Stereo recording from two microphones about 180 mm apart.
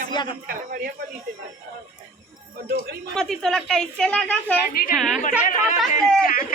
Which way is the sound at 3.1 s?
Centre (ahead or behind).